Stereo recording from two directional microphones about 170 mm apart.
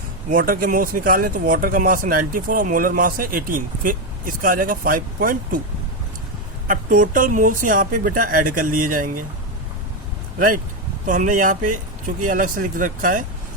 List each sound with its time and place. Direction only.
0.3 s speech: 55° right (ahead or behind)
6.7 s a woman's voice: 50° right (ahead or behind)
11.0 s a woman's voice: 50° right (ahead or behind)